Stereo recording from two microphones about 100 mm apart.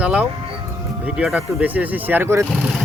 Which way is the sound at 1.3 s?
15° right (ahead or behind).